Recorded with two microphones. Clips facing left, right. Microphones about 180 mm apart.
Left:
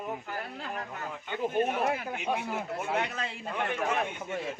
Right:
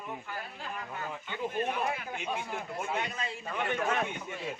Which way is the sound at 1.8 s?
65° left (ahead or behind).